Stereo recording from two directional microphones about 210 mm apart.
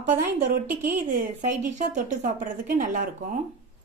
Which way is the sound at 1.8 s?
35° right (ahead or behind).